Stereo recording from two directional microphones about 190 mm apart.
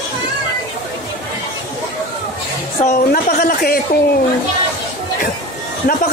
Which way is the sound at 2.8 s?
50° left (ahead or behind).